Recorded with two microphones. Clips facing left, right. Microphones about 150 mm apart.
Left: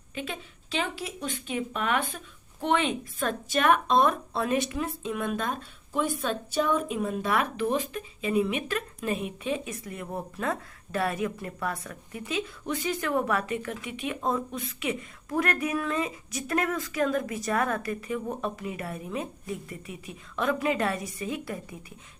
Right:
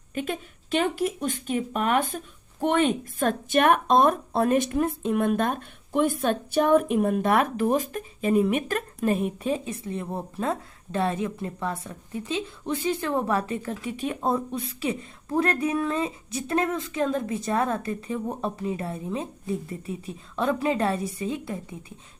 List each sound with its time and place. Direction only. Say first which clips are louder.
0.1 s speech: right 6 dB; 50° right (ahead or behind); by 21.9 s 25° right (ahead or behind)